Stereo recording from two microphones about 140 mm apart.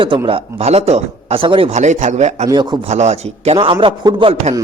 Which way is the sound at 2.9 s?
50° right (ahead or behind).